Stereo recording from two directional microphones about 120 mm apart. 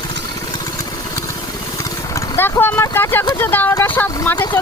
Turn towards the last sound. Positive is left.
turn(degrees=15)  # may be behind; listen again after turning